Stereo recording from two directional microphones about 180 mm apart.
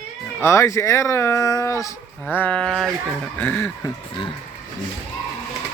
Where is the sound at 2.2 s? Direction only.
5° left (ahead or behind).